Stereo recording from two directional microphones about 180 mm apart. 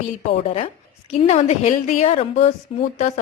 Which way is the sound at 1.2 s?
35° left (ahead or behind).